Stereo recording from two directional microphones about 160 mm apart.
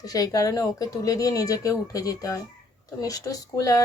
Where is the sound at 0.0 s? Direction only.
20° left (ahead or behind).